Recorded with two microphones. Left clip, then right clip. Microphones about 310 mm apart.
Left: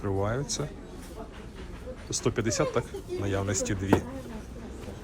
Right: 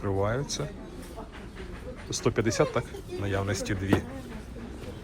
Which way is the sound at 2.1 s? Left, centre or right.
Centre.